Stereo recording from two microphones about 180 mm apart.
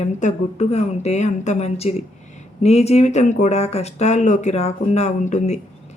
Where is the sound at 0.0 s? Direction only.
40° left (ahead or behind).